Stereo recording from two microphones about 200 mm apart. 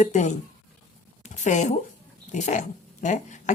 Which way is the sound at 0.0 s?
35° left (ahead or behind).